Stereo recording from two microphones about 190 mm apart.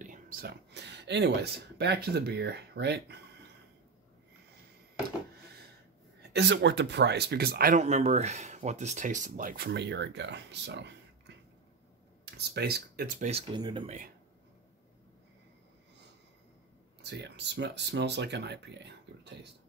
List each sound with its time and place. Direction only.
0.0 s speech: 45° right (ahead or behind); by 3.2 s 60° right (ahead or behind)
6.3 s speech: 65° right (ahead or behind); by 9.7 s 45° right (ahead or behind)
9.7 s speech: 65° right (ahead or behind); by 13.8 s 25° right (ahead or behind)
17.0 s speech: 65° right (ahead or behind)